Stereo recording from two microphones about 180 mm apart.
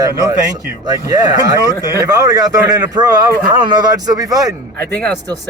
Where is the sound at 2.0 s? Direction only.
20° right (ahead or behind).